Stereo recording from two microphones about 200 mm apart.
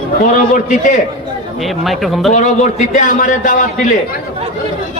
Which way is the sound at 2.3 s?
40° left (ahead or behind).